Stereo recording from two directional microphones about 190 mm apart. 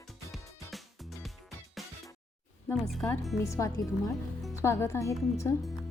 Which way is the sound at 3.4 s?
15° left (ahead or behind).